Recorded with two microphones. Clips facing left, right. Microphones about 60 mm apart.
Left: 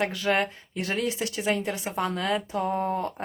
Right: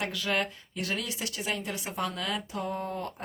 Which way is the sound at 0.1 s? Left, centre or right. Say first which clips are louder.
Left 5 dB; left.